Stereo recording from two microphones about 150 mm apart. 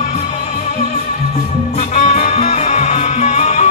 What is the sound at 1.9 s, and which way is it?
Music, 45° left (ahead or behind).